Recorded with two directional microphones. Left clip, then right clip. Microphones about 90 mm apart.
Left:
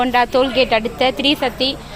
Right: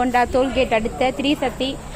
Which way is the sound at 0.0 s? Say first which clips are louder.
Left 3 dB; 10° left (ahead or behind).